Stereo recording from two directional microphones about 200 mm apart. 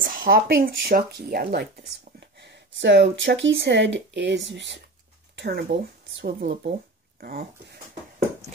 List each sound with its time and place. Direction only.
0.1 s speech: 45° right (ahead or behind)
6.4 s speech: 40° right (ahead or behind)